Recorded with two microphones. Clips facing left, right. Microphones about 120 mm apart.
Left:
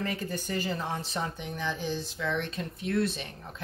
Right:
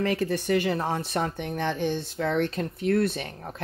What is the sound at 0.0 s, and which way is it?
Speech, 75° right (ahead or behind).